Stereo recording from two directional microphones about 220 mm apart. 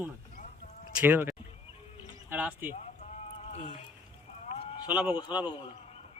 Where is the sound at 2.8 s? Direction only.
30° left (ahead or behind).